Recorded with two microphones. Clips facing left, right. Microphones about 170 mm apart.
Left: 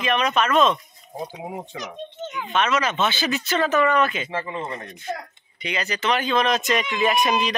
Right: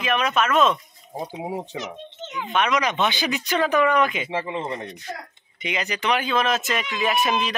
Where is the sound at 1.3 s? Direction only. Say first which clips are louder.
Right 3 dB; 15° right (ahead or behind).